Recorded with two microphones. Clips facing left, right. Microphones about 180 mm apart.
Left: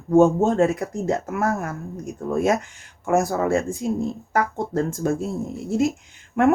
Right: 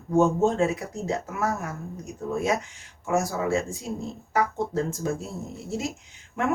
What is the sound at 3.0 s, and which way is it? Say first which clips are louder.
Speech: left 5 dB; 55° left (ahead or behind).